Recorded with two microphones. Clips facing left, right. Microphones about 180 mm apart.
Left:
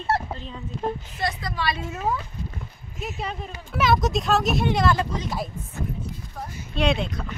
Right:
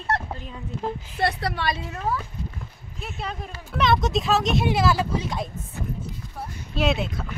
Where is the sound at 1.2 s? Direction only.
65° right (ahead or behind).